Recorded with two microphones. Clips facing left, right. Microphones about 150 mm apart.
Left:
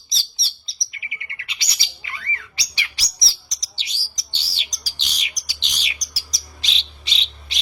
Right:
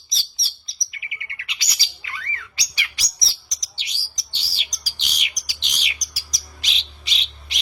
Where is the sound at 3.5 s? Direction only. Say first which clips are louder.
Left 1 dB; 30° left (ahead or behind).